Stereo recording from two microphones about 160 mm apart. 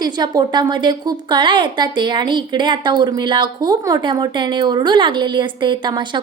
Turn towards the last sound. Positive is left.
turn(degrees=-30)  # may be behind; listen again after turning